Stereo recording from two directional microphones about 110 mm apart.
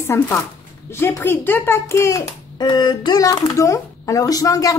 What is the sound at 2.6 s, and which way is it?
Speech, 40° left (ahead or behind).